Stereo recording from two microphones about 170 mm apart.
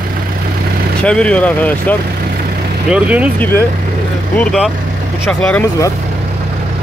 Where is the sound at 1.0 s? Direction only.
5° left (ahead or behind).